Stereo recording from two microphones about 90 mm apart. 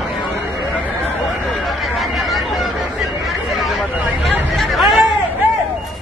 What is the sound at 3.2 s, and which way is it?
Hubbub, centre (ahead or behind).